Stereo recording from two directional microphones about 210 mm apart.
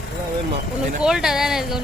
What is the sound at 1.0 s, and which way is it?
Speech, 5° right (ahead or behind).